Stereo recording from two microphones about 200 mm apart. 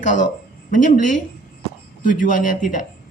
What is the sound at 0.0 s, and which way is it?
Speech, 40° left (ahead or behind).